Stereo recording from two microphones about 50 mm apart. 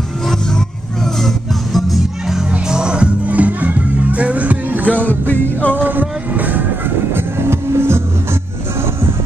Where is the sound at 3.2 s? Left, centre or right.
Right.